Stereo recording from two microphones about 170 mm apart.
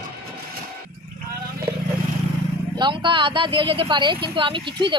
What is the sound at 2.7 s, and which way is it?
A woman's voice, 25° right (ahead or behind).